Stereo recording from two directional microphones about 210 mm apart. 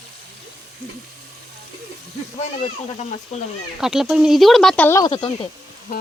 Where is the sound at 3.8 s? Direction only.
Centre (ahead or behind); by 5.1 s 15° left (ahead or behind).